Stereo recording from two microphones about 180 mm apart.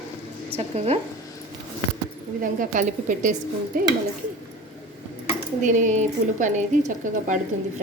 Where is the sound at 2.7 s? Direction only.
45° right (ahead or behind).